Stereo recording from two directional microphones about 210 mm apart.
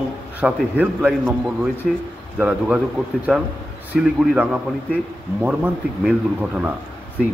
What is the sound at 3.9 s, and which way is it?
Speech, centre (ahead or behind).